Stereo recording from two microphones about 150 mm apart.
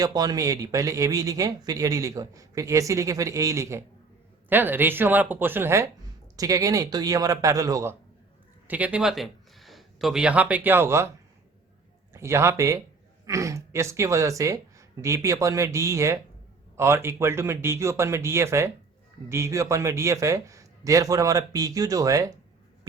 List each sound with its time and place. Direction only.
0.0 s a man's voice: 25° right (ahead or behind)
8.6 s speech: 10° right (ahead or behind)
12.1 s a man's voice: 20° right (ahead or behind)